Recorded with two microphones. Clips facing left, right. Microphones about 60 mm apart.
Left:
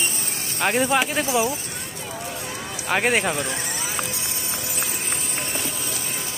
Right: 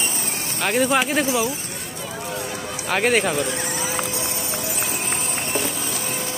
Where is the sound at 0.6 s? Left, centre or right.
Centre.